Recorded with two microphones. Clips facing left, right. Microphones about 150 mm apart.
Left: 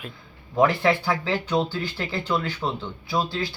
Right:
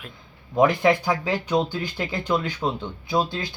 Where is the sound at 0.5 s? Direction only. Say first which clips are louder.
Right 2 dB; 15° right (ahead or behind).